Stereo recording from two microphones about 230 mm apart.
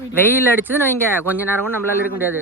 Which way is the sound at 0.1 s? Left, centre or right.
Centre.